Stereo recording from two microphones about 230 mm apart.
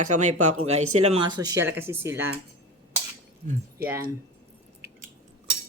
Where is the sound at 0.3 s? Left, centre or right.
Right.